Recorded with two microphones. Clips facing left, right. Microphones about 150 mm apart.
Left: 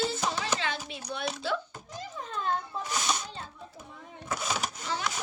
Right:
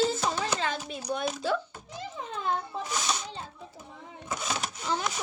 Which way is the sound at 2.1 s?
20° right (ahead or behind).